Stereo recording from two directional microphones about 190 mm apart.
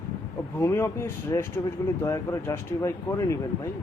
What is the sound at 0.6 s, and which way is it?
Speech, 15° left (ahead or behind).